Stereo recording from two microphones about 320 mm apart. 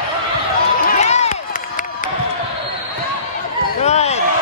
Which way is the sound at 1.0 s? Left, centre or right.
Centre.